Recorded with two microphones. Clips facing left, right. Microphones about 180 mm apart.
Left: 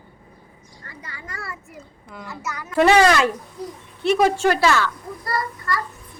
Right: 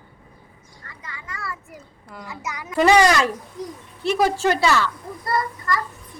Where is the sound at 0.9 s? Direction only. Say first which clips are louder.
Left 1 dB; 35° left (ahead or behind).